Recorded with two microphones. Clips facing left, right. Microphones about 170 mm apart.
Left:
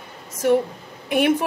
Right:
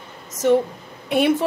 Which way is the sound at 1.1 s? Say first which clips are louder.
Right 1 dB; 15° left (ahead or behind).